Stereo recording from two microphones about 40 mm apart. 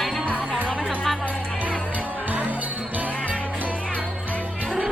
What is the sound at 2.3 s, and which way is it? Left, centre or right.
Music, right.